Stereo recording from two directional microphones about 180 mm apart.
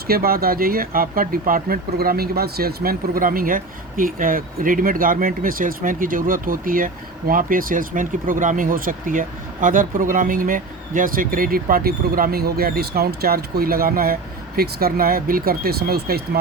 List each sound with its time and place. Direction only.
0.1 s speech: 55° right (ahead or behind)